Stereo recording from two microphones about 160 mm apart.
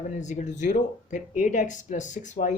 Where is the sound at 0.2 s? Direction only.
50° left (ahead or behind).